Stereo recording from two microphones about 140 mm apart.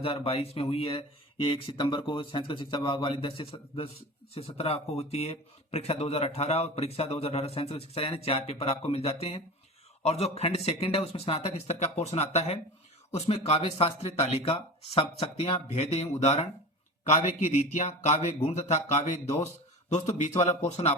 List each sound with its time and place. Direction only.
0.0 s a man's voice: 45° left (ahead or behind)